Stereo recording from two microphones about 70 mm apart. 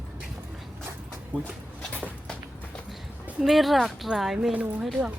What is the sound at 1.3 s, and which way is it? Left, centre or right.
Speech, right.